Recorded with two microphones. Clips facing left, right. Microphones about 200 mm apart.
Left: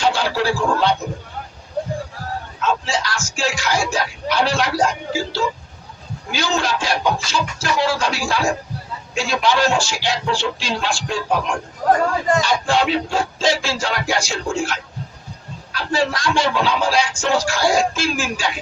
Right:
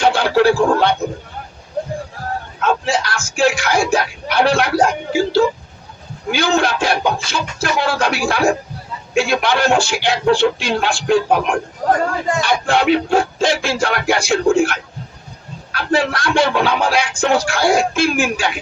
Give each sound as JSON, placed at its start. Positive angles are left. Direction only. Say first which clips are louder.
{"t": 0.0, "sound": "music", "louder": "right 6 dB", "side_deg": -60}
{"t": 2.6, "sound": "speech", "louder": "right 4 dB", "side_deg": -60}